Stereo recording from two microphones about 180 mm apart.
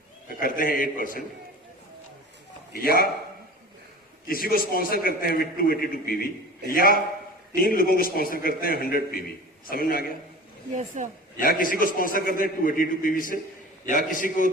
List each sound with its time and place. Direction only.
0.3 s a man's voice: 50° left (ahead or behind)
2.7 s a man's voice: 55° left (ahead or behind)
4.3 s a man's voice: 55° left (ahead or behind)
7.5 s a man's voice: 55° left (ahead or behind)
10.8 s a woman's voice: 40° right (ahead or behind)
11.3 s a man's voice: 50° left (ahead or behind)